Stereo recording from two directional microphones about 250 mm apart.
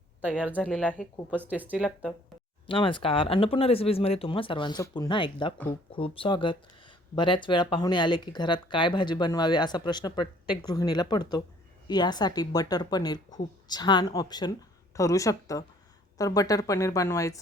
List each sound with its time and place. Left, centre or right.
0.3 s speech: centre
1.3 s speech: centre
2.6 s speech: centre